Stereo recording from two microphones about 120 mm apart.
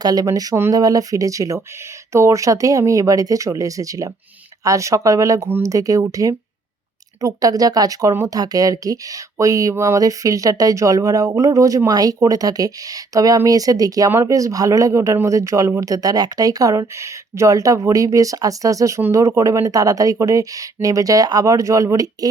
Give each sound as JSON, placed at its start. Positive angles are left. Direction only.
{"t": 0.0, "sound": "speech", "side_deg": -35}
{"t": 5.5, "sound": "speech", "side_deg": -15}
{"t": 5.7, "sound": "speech", "side_deg": -30}